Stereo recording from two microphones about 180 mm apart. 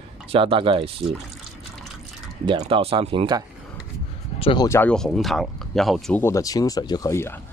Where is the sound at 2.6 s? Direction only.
30° right (ahead or behind).